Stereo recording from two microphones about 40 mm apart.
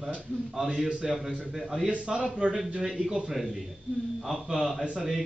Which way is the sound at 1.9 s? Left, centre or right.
Right.